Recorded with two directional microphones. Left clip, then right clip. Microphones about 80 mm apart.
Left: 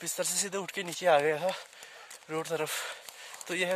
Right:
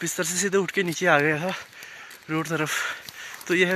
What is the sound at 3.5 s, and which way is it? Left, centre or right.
Speech, left.